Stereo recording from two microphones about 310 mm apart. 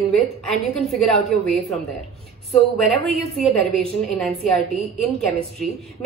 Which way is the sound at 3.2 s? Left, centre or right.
Centre.